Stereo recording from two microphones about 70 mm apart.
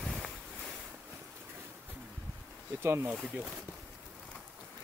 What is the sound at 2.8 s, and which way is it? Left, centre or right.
Speech, right.